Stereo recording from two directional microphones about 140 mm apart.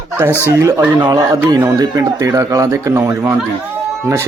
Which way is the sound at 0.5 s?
20° right (ahead or behind).